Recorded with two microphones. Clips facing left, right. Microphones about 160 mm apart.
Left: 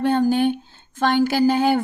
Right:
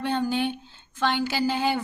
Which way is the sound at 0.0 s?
45° left (ahead or behind).